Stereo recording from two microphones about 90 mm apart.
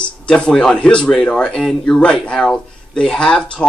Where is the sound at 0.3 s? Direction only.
10° left (ahead or behind).